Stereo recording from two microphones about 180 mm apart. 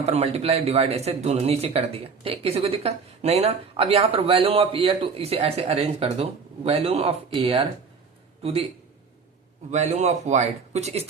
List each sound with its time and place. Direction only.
0.0 s a man's voice: 35° right (ahead or behind)
9.7 s speech: 40° right (ahead or behind)